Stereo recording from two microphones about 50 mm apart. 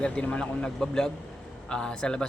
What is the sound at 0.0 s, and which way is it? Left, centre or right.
A man's voice, left.